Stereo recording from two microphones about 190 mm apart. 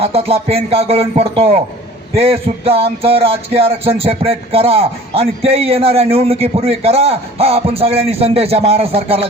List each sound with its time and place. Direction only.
0.0 s music: 30° right (ahead or behind)